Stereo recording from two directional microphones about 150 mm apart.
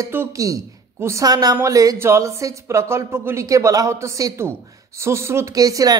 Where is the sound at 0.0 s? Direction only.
20° right (ahead or behind).